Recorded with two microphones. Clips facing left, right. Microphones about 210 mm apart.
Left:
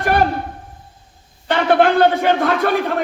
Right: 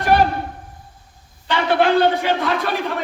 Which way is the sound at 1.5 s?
50° left (ahead or behind).